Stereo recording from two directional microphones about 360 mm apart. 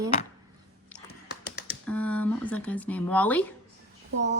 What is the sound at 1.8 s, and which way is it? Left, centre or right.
Speech, centre.